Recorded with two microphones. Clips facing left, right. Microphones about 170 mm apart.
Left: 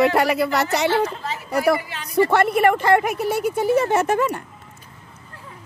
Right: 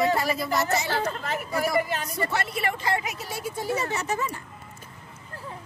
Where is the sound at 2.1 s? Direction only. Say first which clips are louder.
Left 15 dB; 60° left (ahead or behind).